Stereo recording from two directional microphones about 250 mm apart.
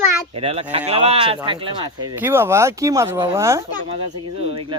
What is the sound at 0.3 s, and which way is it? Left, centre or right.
Speech, right.